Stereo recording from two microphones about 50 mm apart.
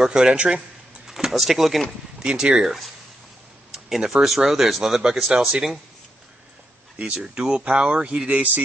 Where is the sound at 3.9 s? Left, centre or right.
Centre.